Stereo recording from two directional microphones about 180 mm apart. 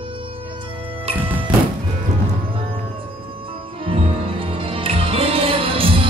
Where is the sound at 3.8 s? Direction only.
30° right (ahead or behind).